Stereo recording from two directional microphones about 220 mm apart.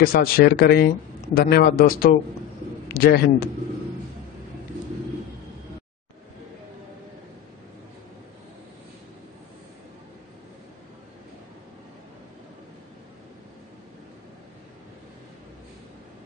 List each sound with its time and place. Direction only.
0.0 s a man's voice: 45° left (ahead or behind)